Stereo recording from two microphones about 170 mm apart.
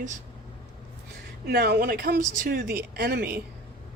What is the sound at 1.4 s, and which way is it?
Speech, 70° right (ahead or behind).